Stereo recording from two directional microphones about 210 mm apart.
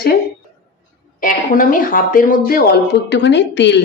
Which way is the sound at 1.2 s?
40° left (ahead or behind).